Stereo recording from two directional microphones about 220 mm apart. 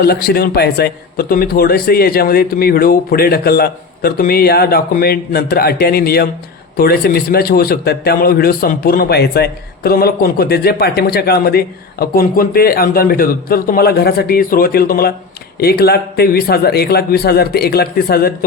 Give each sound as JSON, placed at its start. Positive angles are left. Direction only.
{"t": 0.0, "sound": "a man's voice", "side_deg": 45}